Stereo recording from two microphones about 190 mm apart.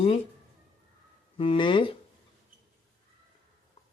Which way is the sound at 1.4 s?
25° left (ahead or behind).